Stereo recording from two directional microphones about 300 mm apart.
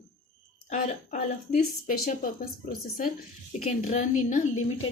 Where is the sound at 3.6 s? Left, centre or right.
Left.